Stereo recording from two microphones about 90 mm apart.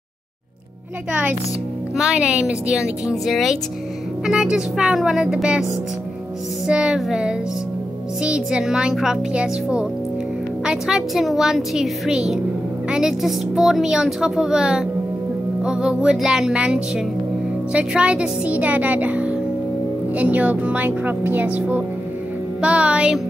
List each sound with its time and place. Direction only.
2.0 s speech: 10° right (ahead or behind)
6.7 s speech: 10° right (ahead or behind)